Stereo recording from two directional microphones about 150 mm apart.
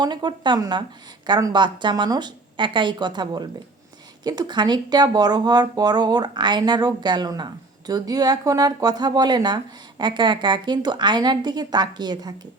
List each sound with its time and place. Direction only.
0.0 s speech: 30° right (ahead or behind)